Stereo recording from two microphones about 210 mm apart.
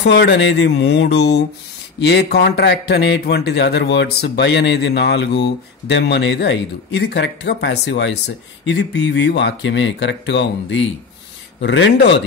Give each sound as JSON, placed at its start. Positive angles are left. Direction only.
{"t": 0.0, "sound": "a man's voice", "side_deg": 55}